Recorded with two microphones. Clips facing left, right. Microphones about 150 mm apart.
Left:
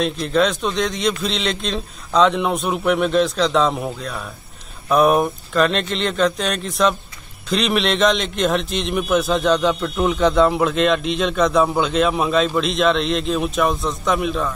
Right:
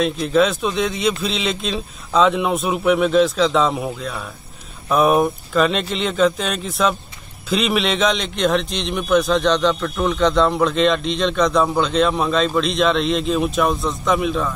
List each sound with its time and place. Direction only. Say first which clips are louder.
0.0 s a man's voice: right 2 dB; centre (ahead or behind)